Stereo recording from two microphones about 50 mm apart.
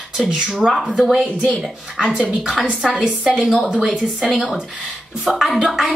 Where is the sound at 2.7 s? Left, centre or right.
Centre.